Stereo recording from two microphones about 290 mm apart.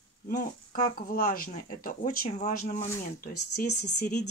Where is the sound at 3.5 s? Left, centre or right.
Left.